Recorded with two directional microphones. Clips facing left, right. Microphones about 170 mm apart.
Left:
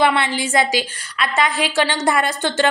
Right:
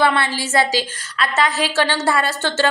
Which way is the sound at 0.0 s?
15° left (ahead or behind).